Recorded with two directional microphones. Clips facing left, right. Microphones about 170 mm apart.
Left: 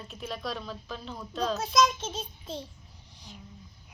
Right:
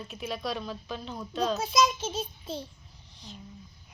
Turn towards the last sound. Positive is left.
turn(degrees=10)  # may be behind; listen again after turning